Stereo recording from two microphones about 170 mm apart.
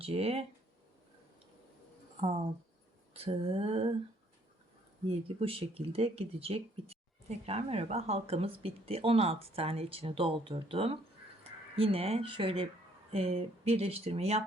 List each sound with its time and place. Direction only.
0.0 s speech: 35° right (ahead or behind)
3.1 s speech: 35° right (ahead or behind)
5.0 s speech: 35° right (ahead or behind)